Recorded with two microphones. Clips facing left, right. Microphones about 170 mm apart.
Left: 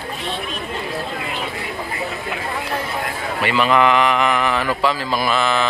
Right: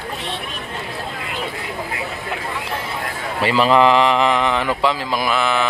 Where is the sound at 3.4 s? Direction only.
35° right (ahead or behind).